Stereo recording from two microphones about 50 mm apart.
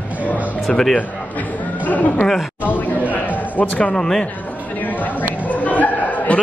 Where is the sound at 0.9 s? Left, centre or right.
Left.